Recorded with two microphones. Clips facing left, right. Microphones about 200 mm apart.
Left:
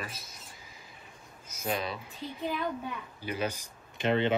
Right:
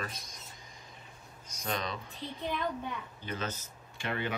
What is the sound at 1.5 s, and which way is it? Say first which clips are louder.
Speech: left 3 dB; 5° left (ahead or behind).